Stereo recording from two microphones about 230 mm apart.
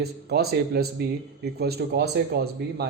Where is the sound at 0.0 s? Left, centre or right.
Right.